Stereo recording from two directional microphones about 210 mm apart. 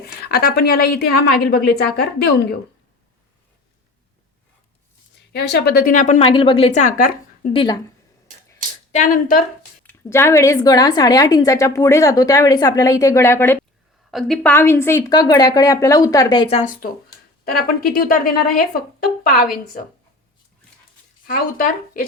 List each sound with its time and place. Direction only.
0.0 s a woman's voice: 50° left (ahead or behind)
5.3 s a woman's voice: 50° left (ahead or behind)
7.5 s a woman's voice: 20° left (ahead or behind)
8.9 s a woman's voice: 40° left (ahead or behind)
9.8 s a woman's voice: 10° left (ahead or behind)
14.1 s a woman's voice: centre (ahead or behind); by 19.5 s 45° left (ahead or behind)
21.2 s a woman's voice: 45° left (ahead or behind)